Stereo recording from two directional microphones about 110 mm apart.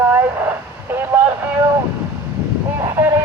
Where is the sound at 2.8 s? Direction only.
25° right (ahead or behind).